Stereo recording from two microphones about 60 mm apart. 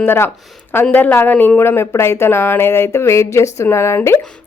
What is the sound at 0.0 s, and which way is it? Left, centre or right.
A woman's voice, left.